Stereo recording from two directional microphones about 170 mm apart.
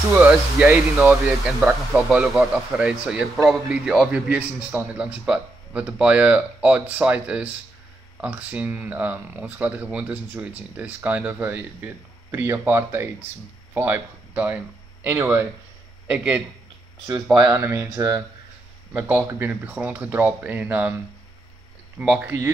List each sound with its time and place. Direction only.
0.2 s speech: 5° right (ahead or behind)
17.4 s speech: 20° right (ahead or behind)
18.9 s speech: 10° right (ahead or behind)
21.9 s speech: 5° right (ahead or behind)